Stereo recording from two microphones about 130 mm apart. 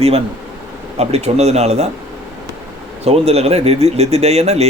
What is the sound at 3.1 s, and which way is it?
Speech, 55° right (ahead or behind).